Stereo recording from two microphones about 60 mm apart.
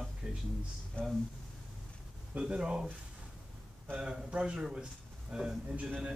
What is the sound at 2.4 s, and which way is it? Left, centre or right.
Speech, centre.